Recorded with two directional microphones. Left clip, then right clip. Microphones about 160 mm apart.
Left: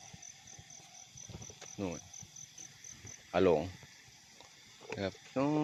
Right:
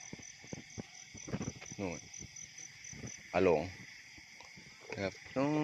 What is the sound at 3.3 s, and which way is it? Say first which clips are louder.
Speech: left 1 dB; 20° left (ahead or behind).